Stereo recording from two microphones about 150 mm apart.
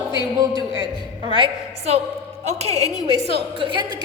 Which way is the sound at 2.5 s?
45° right (ahead or behind).